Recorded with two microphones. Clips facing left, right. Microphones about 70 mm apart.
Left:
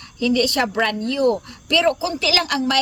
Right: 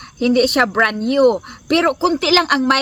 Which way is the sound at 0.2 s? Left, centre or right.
Right.